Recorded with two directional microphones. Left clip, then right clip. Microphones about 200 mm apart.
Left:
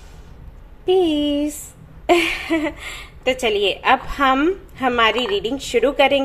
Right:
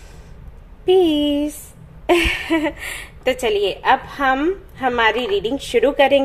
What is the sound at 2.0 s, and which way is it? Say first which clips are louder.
A woman's voice: even; 10° right (ahead or behind).